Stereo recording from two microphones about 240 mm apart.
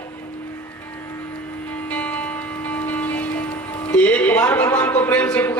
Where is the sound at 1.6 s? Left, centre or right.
Centre.